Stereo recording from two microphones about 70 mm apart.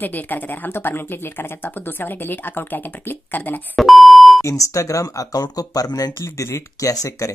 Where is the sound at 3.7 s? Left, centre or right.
Centre.